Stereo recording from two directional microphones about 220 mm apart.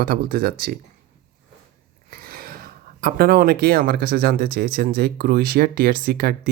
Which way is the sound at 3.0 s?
40° right (ahead or behind).